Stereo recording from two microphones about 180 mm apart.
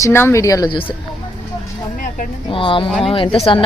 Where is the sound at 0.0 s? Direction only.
15° left (ahead or behind).